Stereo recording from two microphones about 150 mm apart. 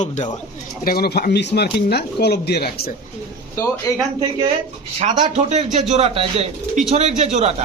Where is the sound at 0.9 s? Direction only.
90° left.